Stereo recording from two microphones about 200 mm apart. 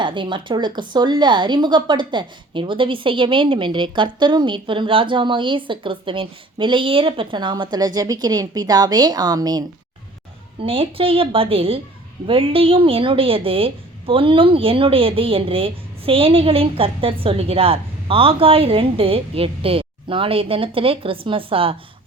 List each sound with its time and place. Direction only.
0.0 s speech: 25° right (ahead or behind)